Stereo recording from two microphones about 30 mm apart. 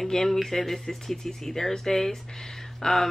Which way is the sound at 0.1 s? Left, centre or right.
Centre.